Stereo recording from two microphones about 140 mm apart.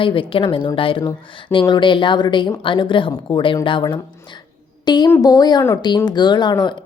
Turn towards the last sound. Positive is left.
turn(degrees=30)  # may be behind; listen again after turning